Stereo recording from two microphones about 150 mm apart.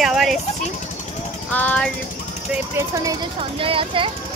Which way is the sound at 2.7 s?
20° right (ahead or behind).